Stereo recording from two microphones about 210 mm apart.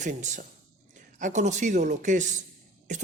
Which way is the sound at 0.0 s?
35° right (ahead or behind).